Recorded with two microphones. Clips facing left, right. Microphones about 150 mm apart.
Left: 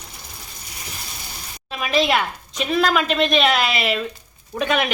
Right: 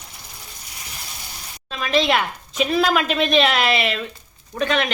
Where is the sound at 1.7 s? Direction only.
10° left (ahead or behind).